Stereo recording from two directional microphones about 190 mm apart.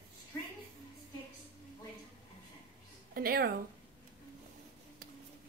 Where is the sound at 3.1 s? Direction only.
50° right (ahead or behind).